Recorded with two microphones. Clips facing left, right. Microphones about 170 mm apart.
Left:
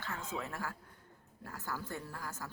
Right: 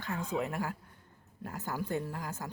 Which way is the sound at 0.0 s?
15° right (ahead or behind).